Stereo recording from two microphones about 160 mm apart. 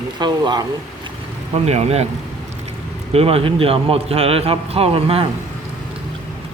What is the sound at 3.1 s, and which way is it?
A man's voice, 40° right (ahead or behind).